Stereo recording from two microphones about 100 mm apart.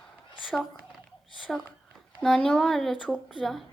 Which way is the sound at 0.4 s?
Centre (ahead or behind).